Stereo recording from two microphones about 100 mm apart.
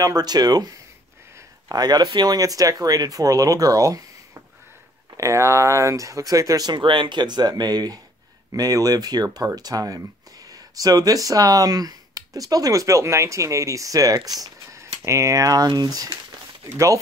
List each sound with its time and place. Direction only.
0.0 s speech: 40° right (ahead or behind)